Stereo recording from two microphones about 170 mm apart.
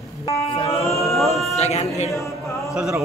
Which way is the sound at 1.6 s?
40° left (ahead or behind).